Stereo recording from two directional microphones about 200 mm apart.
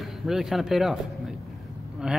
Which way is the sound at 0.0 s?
Centre (ahead or behind).